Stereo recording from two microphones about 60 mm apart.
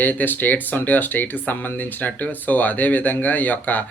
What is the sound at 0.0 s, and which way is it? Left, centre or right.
Speech, left.